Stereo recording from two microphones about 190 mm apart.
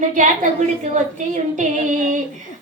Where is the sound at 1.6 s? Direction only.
40° right (ahead or behind).